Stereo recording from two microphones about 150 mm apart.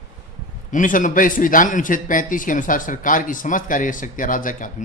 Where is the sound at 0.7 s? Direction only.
60° left (ahead or behind).